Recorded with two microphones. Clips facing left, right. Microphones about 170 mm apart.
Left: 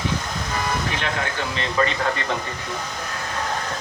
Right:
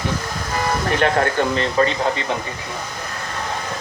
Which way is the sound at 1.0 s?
45° right (ahead or behind).